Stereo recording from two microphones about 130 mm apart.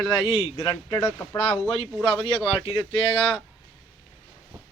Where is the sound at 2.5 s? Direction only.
40° left (ahead or behind).